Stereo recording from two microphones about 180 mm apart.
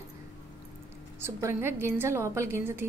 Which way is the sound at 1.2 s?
15° right (ahead or behind).